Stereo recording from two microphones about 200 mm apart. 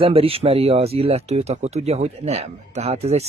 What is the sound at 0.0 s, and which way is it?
Speech, 30° right (ahead or behind).